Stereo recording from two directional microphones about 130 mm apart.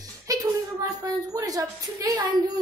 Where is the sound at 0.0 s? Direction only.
30° right (ahead or behind).